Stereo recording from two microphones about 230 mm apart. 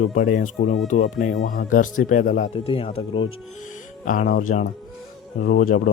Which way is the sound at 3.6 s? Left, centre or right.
Left.